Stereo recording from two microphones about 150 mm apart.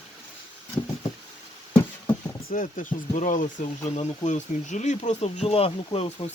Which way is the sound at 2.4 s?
70° left (ahead or behind).